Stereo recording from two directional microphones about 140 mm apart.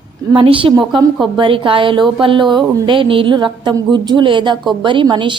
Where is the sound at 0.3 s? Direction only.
40° right (ahead or behind).